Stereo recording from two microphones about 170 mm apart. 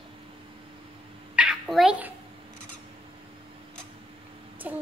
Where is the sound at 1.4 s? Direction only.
5° right (ahead or behind).